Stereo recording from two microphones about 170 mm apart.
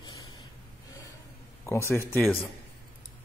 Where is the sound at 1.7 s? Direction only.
15° left (ahead or behind).